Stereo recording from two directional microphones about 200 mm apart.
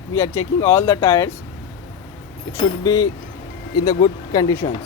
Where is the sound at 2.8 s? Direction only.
20° left (ahead or behind).